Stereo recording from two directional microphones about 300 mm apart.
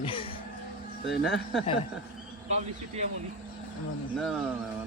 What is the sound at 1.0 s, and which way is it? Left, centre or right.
Speech, left.